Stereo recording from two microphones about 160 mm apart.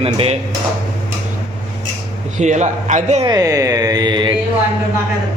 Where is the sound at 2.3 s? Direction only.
50° right (ahead or behind).